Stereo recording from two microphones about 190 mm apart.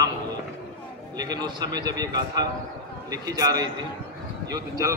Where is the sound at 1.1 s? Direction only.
20° right (ahead or behind).